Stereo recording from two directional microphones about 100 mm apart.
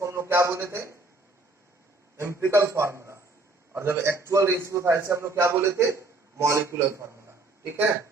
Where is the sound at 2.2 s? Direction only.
25° right (ahead or behind).